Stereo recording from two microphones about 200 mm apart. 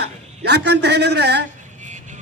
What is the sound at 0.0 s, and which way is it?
A man's voice, 55° right (ahead or behind).